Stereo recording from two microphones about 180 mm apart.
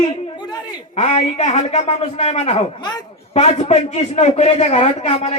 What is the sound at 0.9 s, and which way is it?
A man's voice, 35° left (ahead or behind).